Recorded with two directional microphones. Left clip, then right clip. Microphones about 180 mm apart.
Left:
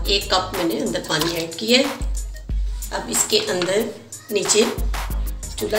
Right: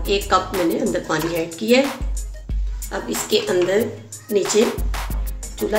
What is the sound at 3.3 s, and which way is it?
Speech, 70° right (ahead or behind).